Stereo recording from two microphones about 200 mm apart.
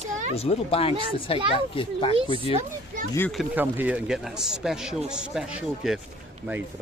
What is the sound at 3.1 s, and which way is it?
A woman's voice, 5° left (ahead or behind).